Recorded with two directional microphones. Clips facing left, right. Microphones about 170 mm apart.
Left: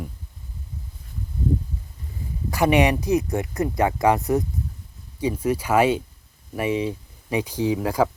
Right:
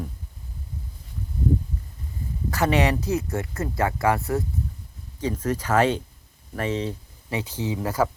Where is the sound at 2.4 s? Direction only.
15° left (ahead or behind).